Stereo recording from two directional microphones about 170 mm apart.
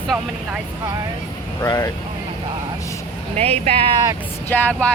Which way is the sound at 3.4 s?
35° right (ahead or behind).